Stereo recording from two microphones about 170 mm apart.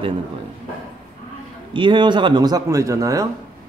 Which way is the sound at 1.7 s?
30° right (ahead or behind).